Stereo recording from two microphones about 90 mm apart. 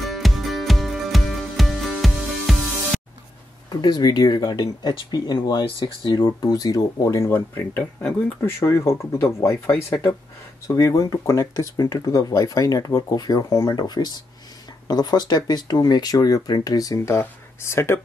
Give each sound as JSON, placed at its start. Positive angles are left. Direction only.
{"t": 0.0, "sound": "music", "side_deg": 0}
{"t": 3.7, "sound": "speech", "side_deg": 50}
{"t": 7.2, "sound": "speech", "side_deg": 25}